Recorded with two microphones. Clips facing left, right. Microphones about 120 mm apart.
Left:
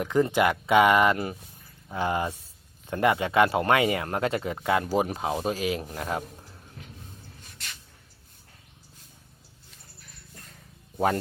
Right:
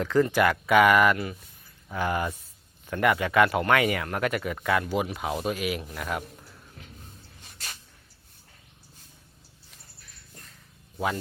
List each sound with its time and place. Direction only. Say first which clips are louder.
0.0 s speech: even; 20° left (ahead or behind)
4.9 s speech: left 2 dB; 35° left (ahead or behind)